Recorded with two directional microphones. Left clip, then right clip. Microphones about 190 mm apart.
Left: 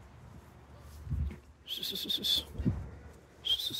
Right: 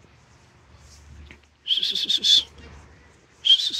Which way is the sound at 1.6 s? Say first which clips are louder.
Right 13 dB; 10° left (ahead or behind).